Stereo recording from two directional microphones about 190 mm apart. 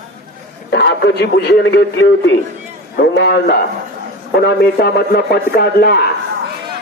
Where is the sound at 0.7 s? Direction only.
65° left (ahead or behind).